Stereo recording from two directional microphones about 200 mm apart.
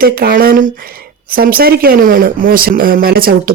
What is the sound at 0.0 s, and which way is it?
A man's voice, 45° right (ahead or behind).